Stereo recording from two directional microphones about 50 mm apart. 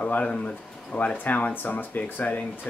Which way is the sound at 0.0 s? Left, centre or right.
Left.